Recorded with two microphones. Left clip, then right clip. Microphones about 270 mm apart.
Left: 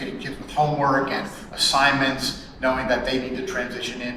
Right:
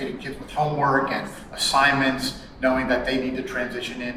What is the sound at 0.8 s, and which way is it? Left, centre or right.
A man's voice, centre.